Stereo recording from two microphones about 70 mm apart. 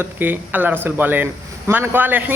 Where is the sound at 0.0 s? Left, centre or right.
Right.